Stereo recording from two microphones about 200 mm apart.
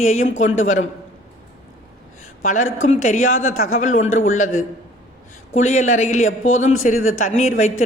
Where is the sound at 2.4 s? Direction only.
40° left (ahead or behind).